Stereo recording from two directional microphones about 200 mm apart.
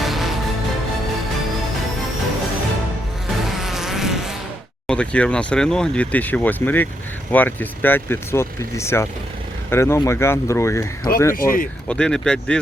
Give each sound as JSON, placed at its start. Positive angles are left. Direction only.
{"t": 0.0, "sound": "music", "side_deg": 0}
{"t": 3.6, "sound": "vehicle", "side_deg": 0}
{"t": 4.9, "sound": "speech", "side_deg": 5}
{"t": 11.3, "sound": "speech", "side_deg": 45}
{"t": 11.9, "sound": "speech", "side_deg": 5}